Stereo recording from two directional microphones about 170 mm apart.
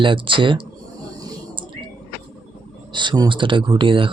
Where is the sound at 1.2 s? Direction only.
30° right (ahead or behind).